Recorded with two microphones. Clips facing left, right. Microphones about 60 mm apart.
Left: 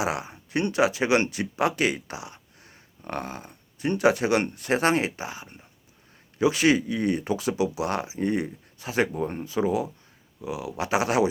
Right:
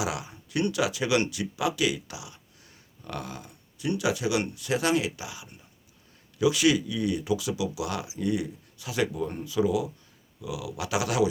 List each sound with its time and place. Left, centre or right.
0.0 s speech: left